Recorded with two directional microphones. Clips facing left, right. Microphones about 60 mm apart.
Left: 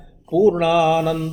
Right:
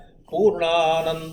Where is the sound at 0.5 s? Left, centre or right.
Centre.